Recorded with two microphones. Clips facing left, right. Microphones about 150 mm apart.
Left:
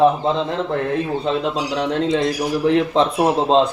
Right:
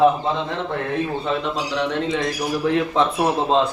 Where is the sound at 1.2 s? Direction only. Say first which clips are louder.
Left 3 dB; 35° left (ahead or behind).